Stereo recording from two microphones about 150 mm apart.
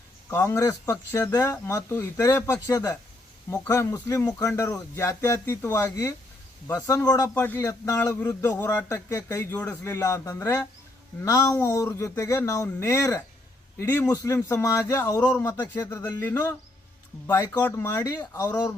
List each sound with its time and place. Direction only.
0.3 s speech: 15° left (ahead or behind)
17.6 s speech: 15° left (ahead or behind)